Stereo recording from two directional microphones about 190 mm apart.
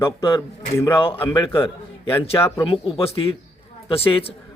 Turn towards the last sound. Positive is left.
turn(degrees=30)  # may be behind; listen again after turning